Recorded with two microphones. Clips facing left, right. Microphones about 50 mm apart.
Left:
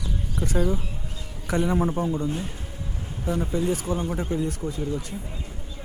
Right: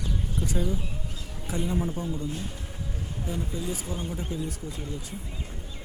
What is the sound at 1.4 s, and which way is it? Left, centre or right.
A man's voice, left.